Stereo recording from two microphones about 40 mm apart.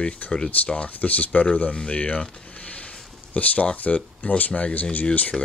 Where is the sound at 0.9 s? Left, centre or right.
Left.